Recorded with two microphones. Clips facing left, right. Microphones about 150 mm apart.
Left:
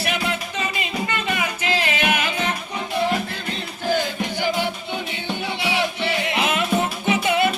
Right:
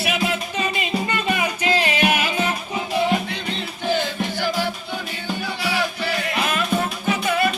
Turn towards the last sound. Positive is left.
turn(degrees=20)  # may be behind; listen again after turning